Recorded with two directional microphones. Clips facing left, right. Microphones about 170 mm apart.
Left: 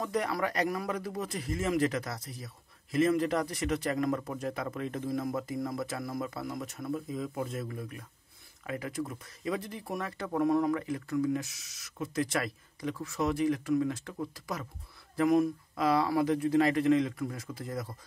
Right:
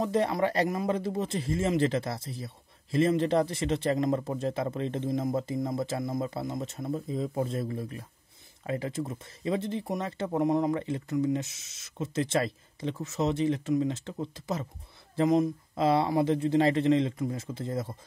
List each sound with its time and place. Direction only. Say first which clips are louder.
0.0 s speech: right 5 dB; 25° right (ahead or behind)